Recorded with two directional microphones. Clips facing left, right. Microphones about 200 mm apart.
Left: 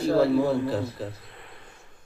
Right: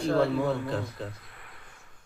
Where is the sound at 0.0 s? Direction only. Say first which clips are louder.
Left 4 dB; 5° left (ahead or behind).